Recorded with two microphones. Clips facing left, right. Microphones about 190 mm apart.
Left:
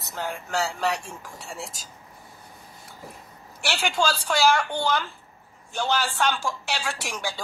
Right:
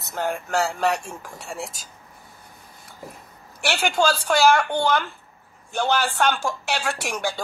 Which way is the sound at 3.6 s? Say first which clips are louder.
Right 4 dB; 50° right (ahead or behind).